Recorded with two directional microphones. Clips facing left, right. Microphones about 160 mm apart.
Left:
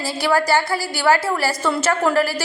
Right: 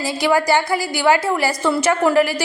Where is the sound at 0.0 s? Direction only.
15° right (ahead or behind).